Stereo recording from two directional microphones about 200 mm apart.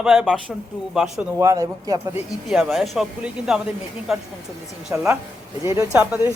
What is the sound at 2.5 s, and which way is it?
A man's voice, centre (ahead or behind).